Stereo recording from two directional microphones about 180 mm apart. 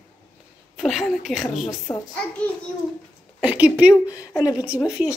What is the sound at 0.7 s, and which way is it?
Speech, centre (ahead or behind).